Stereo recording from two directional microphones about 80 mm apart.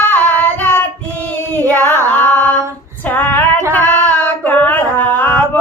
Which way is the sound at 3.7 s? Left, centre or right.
Centre.